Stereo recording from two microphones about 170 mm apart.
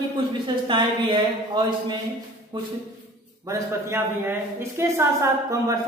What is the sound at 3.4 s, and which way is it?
A woman's voice, 15° right (ahead or behind).